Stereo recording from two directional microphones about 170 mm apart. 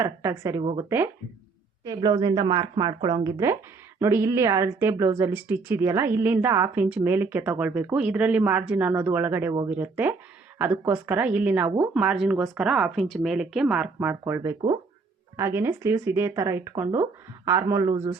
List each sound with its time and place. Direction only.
0.2 s a woman's voice: 15° right (ahead or behind)